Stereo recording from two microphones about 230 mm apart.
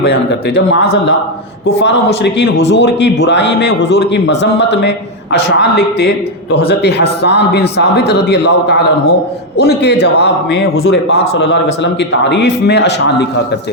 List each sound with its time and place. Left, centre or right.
0.0 s a man's voice: left
2.1 s a man's voice: left
10.7 s a man's voice: left
10.9 s a man's voice: left